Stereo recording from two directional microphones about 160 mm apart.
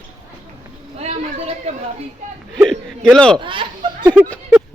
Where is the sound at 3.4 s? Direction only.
30° right (ahead or behind).